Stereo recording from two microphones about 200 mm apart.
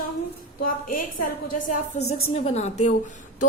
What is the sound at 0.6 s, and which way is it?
A woman's voice, 45° left (ahead or behind).